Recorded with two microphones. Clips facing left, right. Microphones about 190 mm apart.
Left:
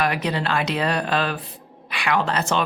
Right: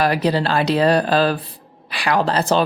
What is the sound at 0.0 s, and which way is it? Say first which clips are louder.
Speech: right 5 dB; 35° right (ahead or behind).